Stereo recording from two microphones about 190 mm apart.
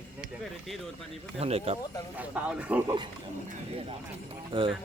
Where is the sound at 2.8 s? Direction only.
25° right (ahead or behind).